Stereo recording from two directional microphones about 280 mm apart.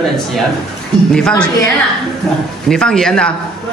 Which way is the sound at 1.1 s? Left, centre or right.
Centre.